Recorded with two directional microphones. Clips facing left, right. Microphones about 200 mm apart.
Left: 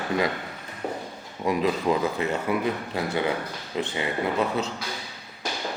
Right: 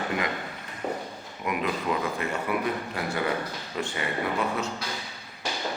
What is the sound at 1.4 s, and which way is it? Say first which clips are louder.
Speech: left 5 dB; 30° left (ahead or behind).